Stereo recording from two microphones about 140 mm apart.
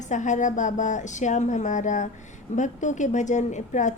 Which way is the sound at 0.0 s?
60° left (ahead or behind).